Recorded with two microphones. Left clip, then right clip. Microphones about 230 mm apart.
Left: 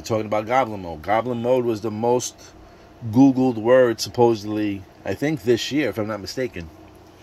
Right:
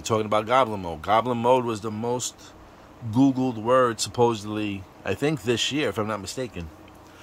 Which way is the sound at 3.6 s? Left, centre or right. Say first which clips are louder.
Left 4 dB; centre.